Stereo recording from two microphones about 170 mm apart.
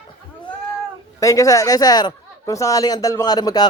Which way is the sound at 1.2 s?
20° left (ahead or behind).